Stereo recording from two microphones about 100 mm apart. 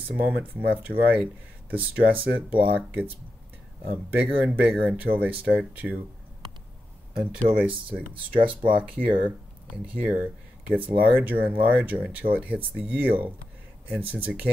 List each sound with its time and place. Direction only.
0.1 s speech: 15° right (ahead or behind)
7.2 s speech: 15° right (ahead or behind)